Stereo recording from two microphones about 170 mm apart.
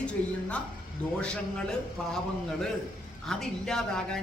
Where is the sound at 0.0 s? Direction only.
5° left (ahead or behind).